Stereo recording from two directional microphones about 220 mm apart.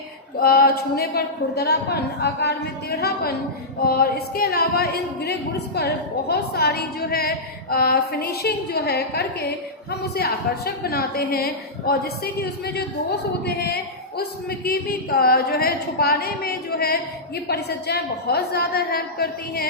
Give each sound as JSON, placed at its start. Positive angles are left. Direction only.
{"t": 0.3, "sound": "speech", "side_deg": 45}